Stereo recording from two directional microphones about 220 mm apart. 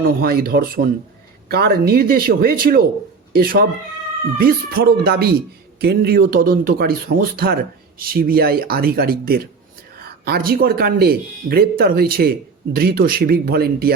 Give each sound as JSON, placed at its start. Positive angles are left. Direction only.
{"t": 0.2, "sound": "speech", "side_deg": -45}